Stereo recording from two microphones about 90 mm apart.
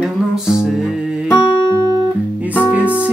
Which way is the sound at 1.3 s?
50° left (ahead or behind).